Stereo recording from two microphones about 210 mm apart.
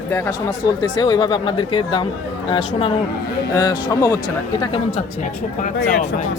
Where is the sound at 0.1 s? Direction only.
15° left (ahead or behind).